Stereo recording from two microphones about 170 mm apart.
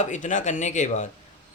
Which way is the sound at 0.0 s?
45° left (ahead or behind).